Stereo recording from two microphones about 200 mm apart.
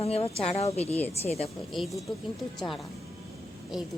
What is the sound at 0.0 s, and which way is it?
A woman's voice, 30° left (ahead or behind).